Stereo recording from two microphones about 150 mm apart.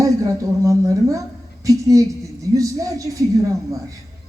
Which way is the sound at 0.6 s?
20° right (ahead or behind).